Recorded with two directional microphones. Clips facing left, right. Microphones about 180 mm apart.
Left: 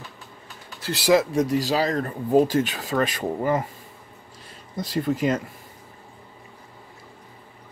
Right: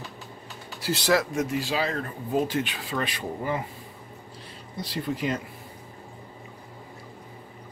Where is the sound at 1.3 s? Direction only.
35° left (ahead or behind).